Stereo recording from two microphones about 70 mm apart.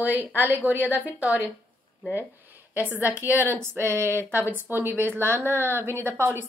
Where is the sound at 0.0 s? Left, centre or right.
Right.